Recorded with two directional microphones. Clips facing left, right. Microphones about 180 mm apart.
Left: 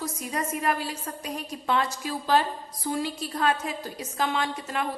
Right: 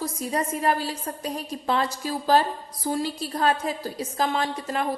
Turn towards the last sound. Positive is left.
turn(degrees=-35)  # may be behind; listen again after turning